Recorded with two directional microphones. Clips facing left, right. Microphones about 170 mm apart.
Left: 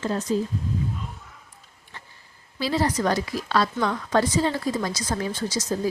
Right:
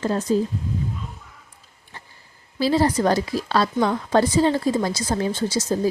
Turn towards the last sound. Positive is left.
turn(degrees=-30)  # may be behind; listen again after turning